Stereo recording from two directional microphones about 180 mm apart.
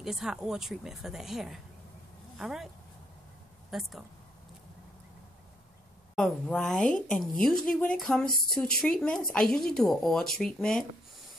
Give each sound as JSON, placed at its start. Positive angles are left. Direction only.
{"t": 0.0, "sound": "a woman's voice", "side_deg": 0}
{"t": 3.7, "sound": "a woman's voice", "side_deg": 0}
{"t": 6.1, "sound": "a woman's voice", "side_deg": 5}